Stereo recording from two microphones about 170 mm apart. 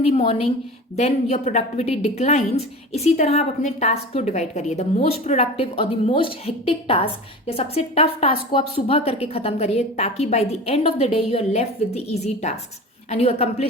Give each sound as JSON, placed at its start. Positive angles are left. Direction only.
{"t": 0.0, "sound": "a woman's voice", "side_deg": 35}